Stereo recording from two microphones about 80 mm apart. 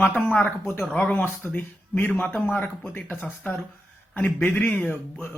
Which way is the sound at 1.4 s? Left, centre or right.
Left.